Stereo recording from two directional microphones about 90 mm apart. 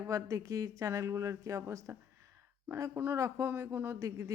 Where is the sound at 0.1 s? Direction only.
35° right (ahead or behind).